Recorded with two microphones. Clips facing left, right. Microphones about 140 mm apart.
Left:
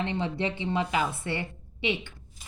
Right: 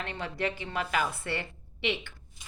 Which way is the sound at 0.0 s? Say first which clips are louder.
Left 4 dB; 25° left (ahead or behind).